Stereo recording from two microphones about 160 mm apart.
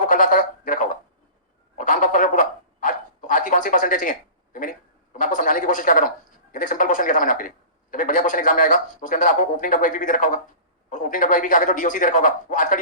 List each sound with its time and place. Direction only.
0.0 s speech: 55° left (ahead or behind)
1.8 s a sound: 55° left (ahead or behind)
5.1 s a man's voice: 55° left (ahead or behind)